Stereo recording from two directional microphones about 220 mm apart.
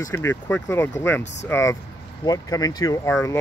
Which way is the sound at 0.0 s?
10° left (ahead or behind).